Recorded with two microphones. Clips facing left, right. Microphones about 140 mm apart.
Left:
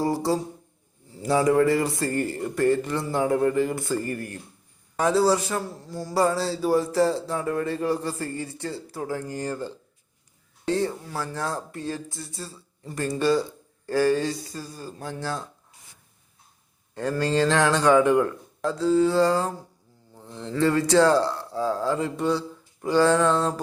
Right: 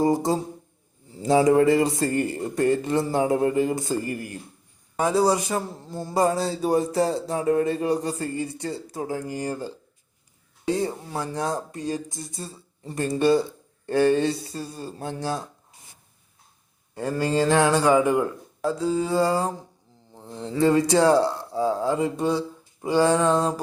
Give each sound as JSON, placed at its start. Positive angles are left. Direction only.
{"t": 0.0, "sound": "a man's voice", "side_deg": -20}
{"t": 16.9, "sound": "a man's voice", "side_deg": -10}
{"t": 20.1, "sound": "a sound", "side_deg": -35}
{"t": 20.4, "sound": "a man's voice", "side_deg": -15}